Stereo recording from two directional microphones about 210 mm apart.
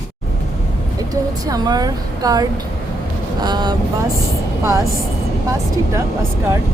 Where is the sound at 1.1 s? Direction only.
15° right (ahead or behind).